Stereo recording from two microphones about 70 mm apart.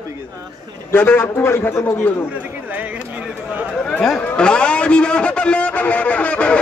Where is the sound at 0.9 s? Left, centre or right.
Left.